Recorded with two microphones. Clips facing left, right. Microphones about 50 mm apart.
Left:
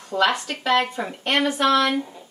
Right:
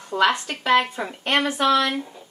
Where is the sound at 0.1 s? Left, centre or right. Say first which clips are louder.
Right 1 dB; centre.